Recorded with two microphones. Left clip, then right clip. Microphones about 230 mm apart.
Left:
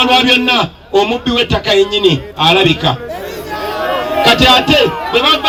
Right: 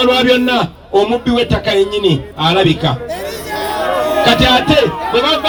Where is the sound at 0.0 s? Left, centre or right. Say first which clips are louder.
Left 1 dB; left.